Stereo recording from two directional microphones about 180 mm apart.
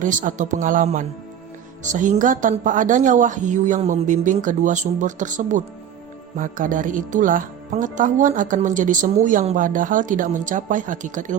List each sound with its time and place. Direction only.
0.0 s speech: 45° right (ahead or behind)